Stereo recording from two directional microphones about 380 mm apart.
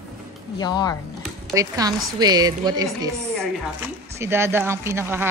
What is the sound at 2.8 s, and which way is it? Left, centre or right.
A woman's voice, centre.